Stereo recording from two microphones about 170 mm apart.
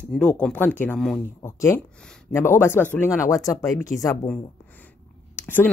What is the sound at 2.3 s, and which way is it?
A woman's voice, 5° left (ahead or behind).